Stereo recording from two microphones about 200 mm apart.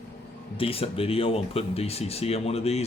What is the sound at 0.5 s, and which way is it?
Speech, 30° left (ahead or behind).